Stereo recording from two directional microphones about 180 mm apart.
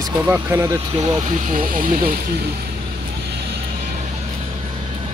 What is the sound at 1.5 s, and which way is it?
Speech, 50° right (ahead or behind).